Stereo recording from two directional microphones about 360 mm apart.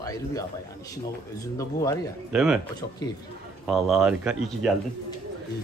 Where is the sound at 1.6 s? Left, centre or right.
Centre.